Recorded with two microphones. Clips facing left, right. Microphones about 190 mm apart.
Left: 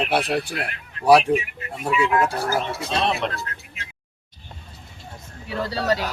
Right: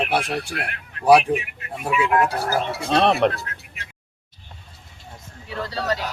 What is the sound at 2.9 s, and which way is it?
Speech, 60° right (ahead or behind).